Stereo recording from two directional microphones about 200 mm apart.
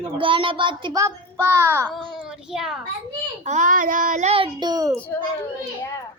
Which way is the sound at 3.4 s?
40° right (ahead or behind).